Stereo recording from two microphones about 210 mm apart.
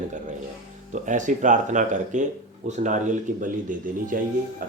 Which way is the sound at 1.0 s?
35° right (ahead or behind).